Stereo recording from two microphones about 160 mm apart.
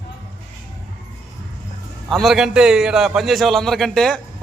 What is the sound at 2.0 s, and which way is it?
A man's voice, centre (ahead or behind).